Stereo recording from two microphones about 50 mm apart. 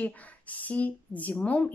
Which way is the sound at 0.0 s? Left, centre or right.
Left.